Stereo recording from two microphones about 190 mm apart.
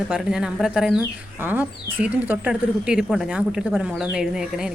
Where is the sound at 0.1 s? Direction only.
5° right (ahead or behind).